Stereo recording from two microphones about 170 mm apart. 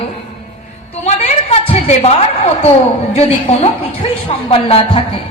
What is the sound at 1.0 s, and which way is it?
A woman's voice, 40° left (ahead or behind).